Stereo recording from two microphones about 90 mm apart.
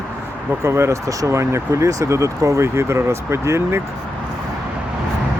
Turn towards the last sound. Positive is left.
turn(degrees=-30)  # may be behind; listen again after turning